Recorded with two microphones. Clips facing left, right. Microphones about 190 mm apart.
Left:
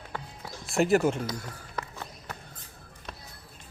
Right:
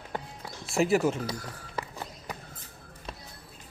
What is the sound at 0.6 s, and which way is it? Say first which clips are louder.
Speech: left 1 dB; centre (ahead or behind).